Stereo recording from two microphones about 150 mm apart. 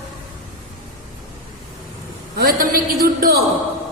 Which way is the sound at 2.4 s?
80° right.